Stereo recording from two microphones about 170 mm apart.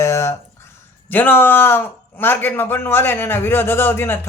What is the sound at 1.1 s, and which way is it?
Speech, 10° left (ahead or behind).